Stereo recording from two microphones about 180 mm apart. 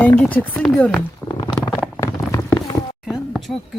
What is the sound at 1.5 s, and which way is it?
Stomach rumble, 5° left (ahead or behind).